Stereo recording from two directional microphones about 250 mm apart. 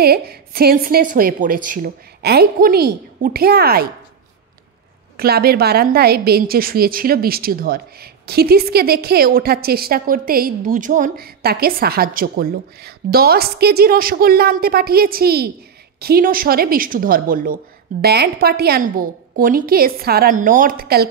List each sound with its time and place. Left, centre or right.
0.0 s a woman's voice: right
5.1 s a woman's voice: right